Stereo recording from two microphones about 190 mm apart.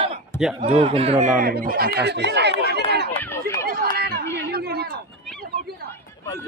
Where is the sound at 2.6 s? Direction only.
60° right (ahead or behind).